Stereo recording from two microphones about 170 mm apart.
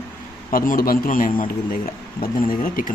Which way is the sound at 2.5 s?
55° left (ahead or behind).